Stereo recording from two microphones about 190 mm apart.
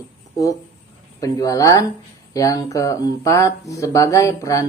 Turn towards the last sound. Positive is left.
turn(degrees=15)  # may be behind; listen again after turning